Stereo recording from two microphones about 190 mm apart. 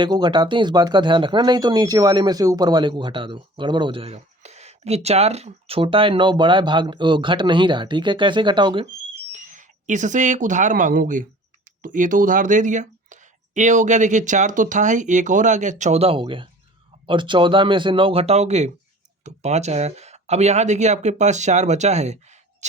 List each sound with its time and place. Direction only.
0.0 s speech: 25° right (ahead or behind)
9.3 s speech: 40° right (ahead or behind)